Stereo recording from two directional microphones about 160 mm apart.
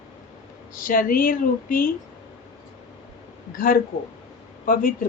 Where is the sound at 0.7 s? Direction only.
60° left (ahead or behind).